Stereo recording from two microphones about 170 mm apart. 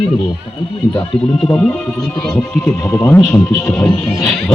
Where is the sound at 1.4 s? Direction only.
5° left (ahead or behind).